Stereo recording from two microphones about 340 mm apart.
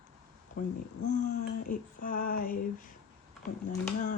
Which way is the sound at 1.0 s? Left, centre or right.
Left.